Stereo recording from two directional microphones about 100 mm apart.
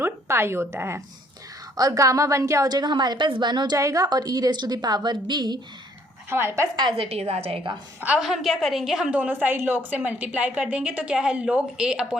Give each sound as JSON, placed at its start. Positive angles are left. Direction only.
{"t": 0.0, "sound": "a woman's voice", "side_deg": -25}
{"t": 3.8, "sound": "a woman's voice", "side_deg": -35}
{"t": 6.3, "sound": "speech", "side_deg": -25}
{"t": 6.9, "sound": "a woman's voice", "side_deg": -80}
{"t": 8.0, "sound": "a woman's voice", "side_deg": -10}
{"t": 9.1, "sound": "a woman's voice", "side_deg": -15}